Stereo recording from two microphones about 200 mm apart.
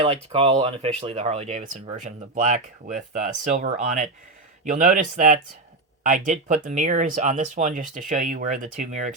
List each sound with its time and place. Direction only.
0.0 s speech: 30° right (ahead or behind)